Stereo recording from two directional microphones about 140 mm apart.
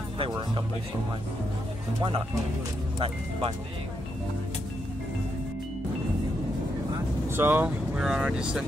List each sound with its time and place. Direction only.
3.0 s speech: 45° right (ahead or behind)
7.2 s speech: 15° right (ahead or behind)